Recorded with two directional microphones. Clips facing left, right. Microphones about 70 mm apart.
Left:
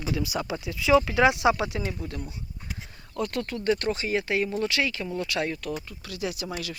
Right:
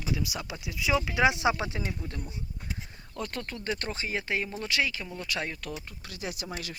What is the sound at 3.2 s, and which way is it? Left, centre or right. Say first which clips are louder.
Speech: left 6 dB; right.